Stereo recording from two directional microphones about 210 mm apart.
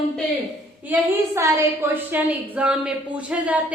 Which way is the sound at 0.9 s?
10° right (ahead or behind).